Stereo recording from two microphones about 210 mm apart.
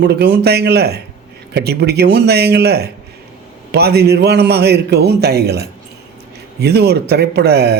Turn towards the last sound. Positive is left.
turn(degrees=-50)  # may be behind; listen again after turning